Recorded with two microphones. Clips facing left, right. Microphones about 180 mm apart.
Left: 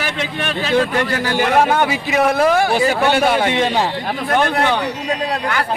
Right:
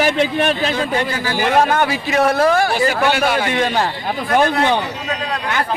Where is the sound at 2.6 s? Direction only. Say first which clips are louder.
Left 1 dB; 20° left (ahead or behind).